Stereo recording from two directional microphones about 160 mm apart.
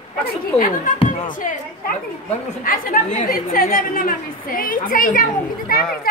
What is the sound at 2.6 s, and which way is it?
A woman's voice, 60° left (ahead or behind).